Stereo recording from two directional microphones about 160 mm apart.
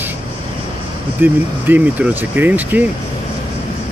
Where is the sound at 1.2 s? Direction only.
15° right (ahead or behind).